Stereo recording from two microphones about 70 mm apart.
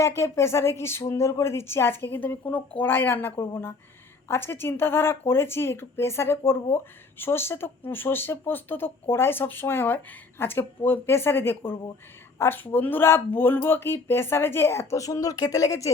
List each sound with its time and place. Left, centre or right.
0.0 s speech: left